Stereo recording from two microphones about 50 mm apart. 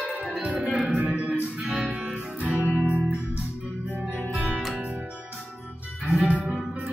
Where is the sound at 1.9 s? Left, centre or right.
Right.